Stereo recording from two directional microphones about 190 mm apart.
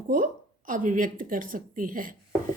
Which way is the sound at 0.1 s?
45° right (ahead or behind).